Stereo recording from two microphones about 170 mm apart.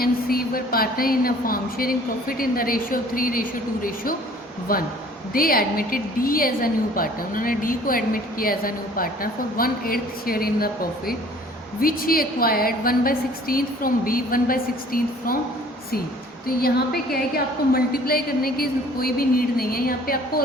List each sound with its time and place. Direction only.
0.0 s a woman's voice: 60° left (ahead or behind)
4.7 s a woman's voice: 55° left (ahead or behind)
16.6 s a woman's voice: 65° left (ahead or behind)